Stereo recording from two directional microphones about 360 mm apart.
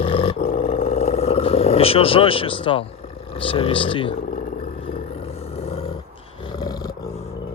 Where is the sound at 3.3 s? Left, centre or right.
Centre.